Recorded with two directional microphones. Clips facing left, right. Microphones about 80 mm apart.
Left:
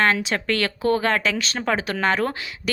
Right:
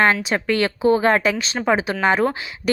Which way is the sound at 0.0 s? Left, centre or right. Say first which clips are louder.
Right 3 dB; centre.